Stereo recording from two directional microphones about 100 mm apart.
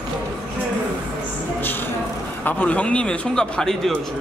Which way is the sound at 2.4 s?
15° left (ahead or behind).